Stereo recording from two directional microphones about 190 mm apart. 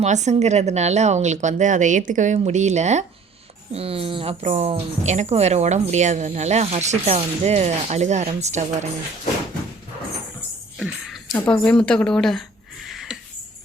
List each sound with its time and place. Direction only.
0.0 s a woman's voice: 35° right (ahead or behind)
10.8 s speech: centre (ahead or behind)
12.9 s a sound: centre (ahead or behind)